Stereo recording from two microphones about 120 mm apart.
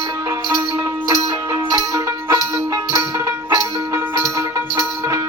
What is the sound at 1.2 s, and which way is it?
Music, 30° right (ahead or behind).